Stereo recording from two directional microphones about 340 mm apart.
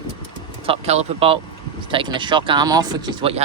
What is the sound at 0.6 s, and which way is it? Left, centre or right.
Speech, centre.